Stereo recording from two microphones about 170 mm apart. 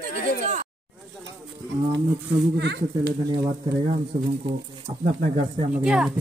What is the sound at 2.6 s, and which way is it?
Speech, 80° right.